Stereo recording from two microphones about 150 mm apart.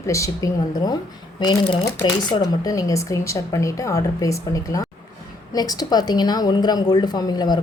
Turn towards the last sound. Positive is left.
turn(degrees=25)  # may be behind; listen again after turning